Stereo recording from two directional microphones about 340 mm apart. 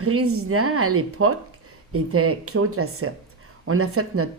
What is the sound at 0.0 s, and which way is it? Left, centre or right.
A woman's voice, right.